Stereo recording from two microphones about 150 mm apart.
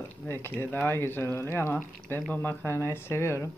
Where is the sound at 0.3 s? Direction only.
15° left (ahead or behind).